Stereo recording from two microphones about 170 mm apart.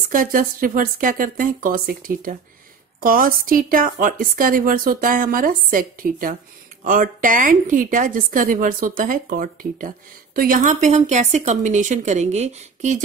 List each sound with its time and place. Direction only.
0.1 s a woman's voice: 55° right (ahead or behind)